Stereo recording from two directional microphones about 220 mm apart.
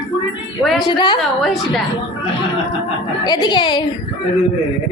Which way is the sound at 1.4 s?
Centre (ahead or behind).